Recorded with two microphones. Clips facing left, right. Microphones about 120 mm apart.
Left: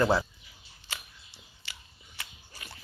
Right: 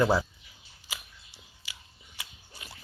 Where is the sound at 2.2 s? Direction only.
20° right (ahead or behind).